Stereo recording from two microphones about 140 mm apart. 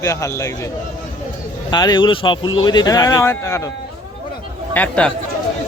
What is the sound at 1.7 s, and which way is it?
Speech, 30° left (ahead or behind).